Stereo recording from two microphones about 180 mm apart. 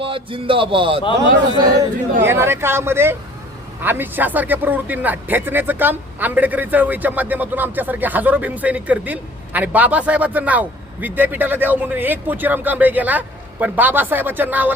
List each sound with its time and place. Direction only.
0.0 s speech: 30° right (ahead or behind)
1.6 s speech: 15° right (ahead or behind)